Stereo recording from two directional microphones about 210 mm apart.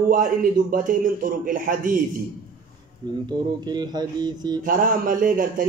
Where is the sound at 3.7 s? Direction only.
20° right (ahead or behind).